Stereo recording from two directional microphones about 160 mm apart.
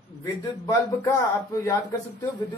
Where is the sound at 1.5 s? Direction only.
20° left (ahead or behind).